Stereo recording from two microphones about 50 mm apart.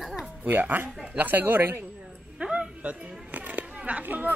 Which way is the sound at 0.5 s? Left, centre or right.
Right.